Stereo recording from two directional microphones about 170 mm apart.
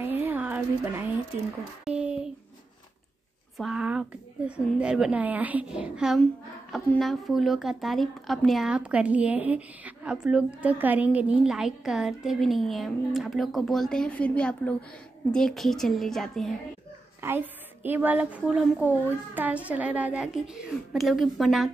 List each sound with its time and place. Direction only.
0.0 s a sound: 10° right (ahead or behind)
3.5 s a woman's voice: 5° right (ahead or behind)
17.2 s a woman's voice: 15° right (ahead or behind)